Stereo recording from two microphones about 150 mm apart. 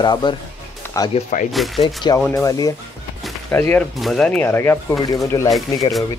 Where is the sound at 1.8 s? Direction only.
30° left (ahead or behind).